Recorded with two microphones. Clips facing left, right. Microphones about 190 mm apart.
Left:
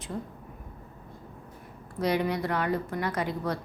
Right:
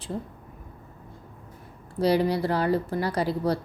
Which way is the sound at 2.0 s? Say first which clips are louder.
Right 5 dB; 30° right (ahead or behind).